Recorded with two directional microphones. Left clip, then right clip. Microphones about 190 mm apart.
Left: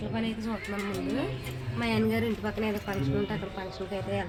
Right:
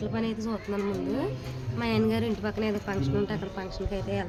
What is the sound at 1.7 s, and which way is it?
A woman's voice, 25° right (ahead or behind).